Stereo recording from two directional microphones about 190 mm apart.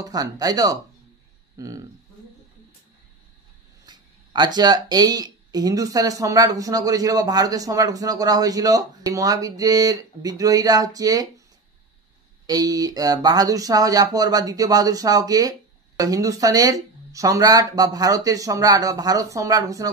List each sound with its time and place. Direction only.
0.0 s speech: 20° right (ahead or behind)
3.8 s speech: 20° right (ahead or behind)
12.4 s speech: 20° right (ahead or behind)